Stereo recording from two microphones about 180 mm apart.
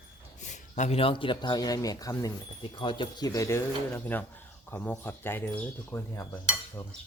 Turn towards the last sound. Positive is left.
turn(degrees=20)  # may be behind; listen again after turning